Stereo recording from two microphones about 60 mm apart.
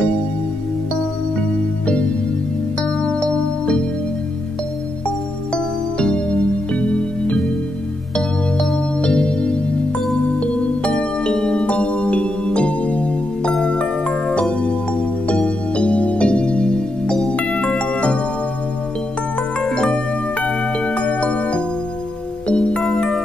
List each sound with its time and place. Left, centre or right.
1.9 s music: left
5.0 s music: centre
19.6 s music: centre